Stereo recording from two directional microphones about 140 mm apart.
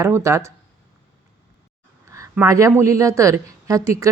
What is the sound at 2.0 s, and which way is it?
A woman's voice, 20° right (ahead or behind).